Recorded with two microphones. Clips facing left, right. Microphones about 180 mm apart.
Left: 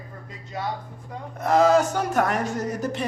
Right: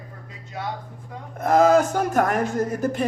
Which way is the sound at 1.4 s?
50° right (ahead or behind).